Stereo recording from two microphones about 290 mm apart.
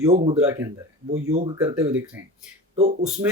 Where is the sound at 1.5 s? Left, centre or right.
Centre.